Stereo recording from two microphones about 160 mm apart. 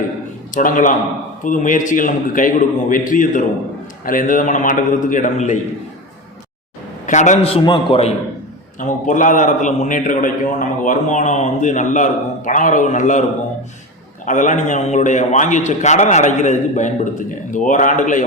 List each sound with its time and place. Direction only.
0.5 s a man's voice: 55° left (ahead or behind)
7.0 s a man's voice: 50° left (ahead or behind)
8.8 s a man's voice: 55° left (ahead or behind)
14.3 s a man's voice: 50° left (ahead or behind)